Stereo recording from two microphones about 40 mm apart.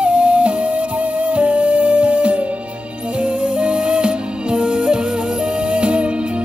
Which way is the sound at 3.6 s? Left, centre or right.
Right.